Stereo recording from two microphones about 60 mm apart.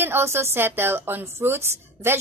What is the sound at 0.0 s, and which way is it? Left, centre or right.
A woman's voice, right.